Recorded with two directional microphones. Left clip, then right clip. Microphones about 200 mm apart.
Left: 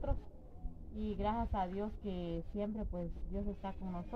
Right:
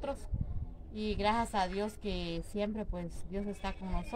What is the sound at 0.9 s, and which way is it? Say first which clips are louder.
A woman's voice: right 6 dB; 20° right (ahead or behind).